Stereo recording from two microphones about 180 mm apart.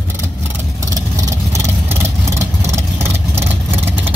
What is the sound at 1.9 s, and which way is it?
Vehicle, 15° right (ahead or behind).